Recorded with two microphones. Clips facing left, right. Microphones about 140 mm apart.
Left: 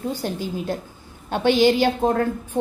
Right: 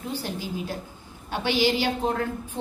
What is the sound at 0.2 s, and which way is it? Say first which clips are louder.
A woman's voice: left 5 dB; 50° left (ahead or behind).